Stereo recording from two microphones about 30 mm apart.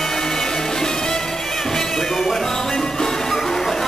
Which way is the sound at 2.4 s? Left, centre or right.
Centre.